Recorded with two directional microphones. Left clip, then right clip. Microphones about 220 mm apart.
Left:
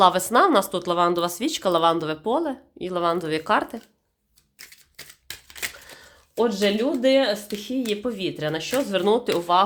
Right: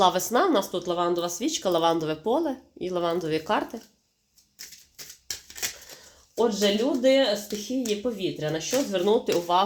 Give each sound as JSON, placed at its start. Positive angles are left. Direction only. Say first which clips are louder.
{"t": 0.3, "sound": "speech", "louder": "left 5 dB", "side_deg": 20}
{"t": 6.3, "sound": "speech", "louder": "left 2 dB", "side_deg": 25}